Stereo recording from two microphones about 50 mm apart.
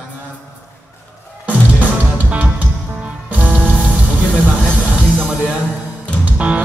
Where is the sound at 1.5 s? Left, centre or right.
Right.